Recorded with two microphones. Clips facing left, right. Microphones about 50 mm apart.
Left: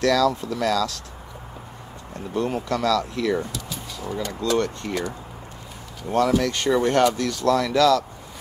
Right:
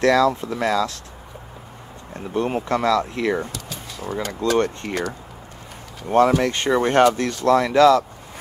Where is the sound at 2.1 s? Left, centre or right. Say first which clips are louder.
Right 2 dB; right.